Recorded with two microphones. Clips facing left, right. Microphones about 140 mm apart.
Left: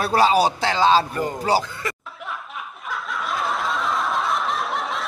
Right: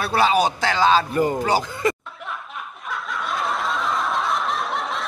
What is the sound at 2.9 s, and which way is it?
Snicker, centre (ahead or behind).